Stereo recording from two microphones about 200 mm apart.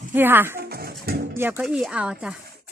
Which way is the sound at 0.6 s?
50° right (ahead or behind).